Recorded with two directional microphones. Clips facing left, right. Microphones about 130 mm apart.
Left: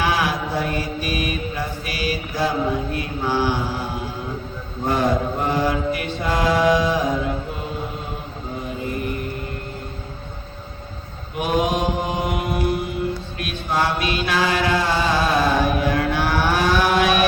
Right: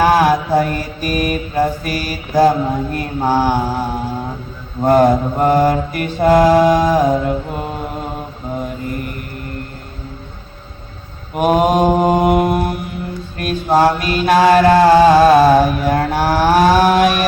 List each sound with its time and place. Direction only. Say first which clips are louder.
0.0 s mantra: right 9 dB; 45° right (ahead or behind)
11.3 s mantra: right 8 dB; 45° right (ahead or behind)